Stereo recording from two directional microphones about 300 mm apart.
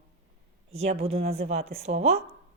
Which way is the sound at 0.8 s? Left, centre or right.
Right.